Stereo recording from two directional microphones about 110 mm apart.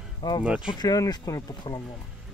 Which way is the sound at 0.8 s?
35° left (ahead or behind).